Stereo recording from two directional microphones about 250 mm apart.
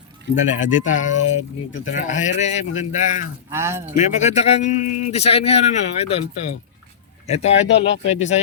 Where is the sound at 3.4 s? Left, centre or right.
Centre.